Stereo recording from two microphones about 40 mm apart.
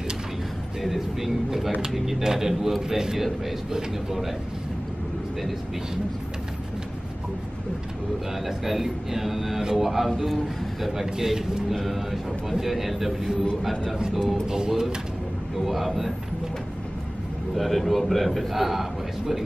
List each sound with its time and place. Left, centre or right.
0.8 s a man's voice: centre
8.5 s a man's voice: centre
11.7 s a man's voice: centre
14.5 s speech: centre
15.6 s a man's voice: centre
17.6 s a man's voice: centre